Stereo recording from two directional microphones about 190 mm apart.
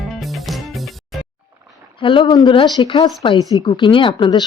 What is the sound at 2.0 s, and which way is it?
A woman's voice, 25° left (ahead or behind).